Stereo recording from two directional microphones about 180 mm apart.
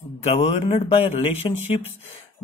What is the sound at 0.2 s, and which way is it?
Speech, 30° left (ahead or behind).